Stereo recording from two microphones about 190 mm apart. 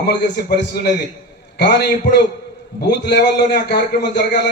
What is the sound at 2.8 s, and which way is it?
Speech, 60° left (ahead or behind).